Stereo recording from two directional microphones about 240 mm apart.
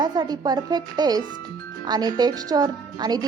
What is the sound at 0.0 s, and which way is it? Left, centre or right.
A woman's voice, centre.